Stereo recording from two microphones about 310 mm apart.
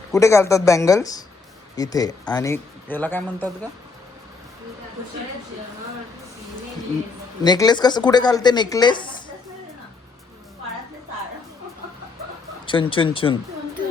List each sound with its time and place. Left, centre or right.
0.1 s speech: centre
7.4 s speech: centre
12.6 s speech: centre